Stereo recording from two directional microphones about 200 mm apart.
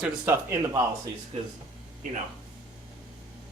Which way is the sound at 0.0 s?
10° right (ahead or behind).